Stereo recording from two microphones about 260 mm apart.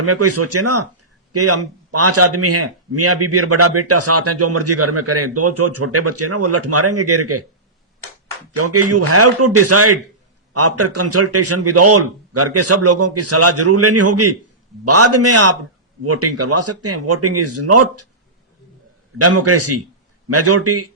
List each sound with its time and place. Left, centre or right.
0.0 s speech: right
8.5 s speech: right
19.2 s speech: right